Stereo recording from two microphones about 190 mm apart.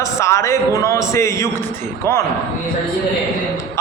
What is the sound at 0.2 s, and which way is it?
Speech, 15° left (ahead or behind).